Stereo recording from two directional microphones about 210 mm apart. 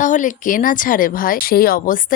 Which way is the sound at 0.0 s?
35° left (ahead or behind).